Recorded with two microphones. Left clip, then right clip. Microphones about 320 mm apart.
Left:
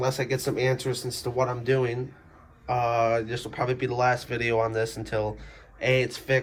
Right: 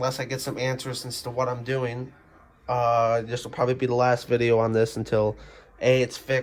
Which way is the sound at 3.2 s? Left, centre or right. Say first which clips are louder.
Right 3 dB; centre.